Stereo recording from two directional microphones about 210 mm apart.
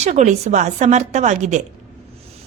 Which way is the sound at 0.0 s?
35° right (ahead or behind).